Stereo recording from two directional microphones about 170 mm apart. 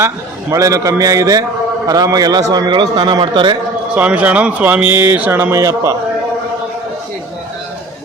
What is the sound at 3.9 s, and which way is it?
Speech, 10° right (ahead or behind).